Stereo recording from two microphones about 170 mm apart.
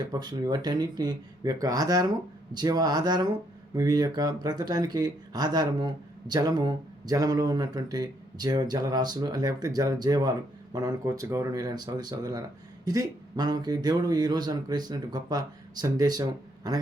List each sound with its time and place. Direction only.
0.0 s speech: 25° right (ahead or behind)